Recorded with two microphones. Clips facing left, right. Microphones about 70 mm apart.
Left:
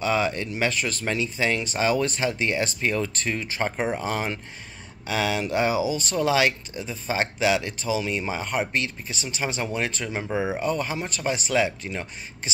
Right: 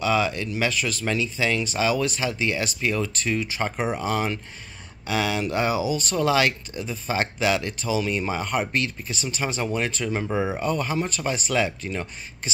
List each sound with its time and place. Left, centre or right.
0.0 s speech: left